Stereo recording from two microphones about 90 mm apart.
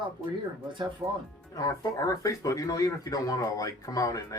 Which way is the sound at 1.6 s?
40° left (ahead or behind).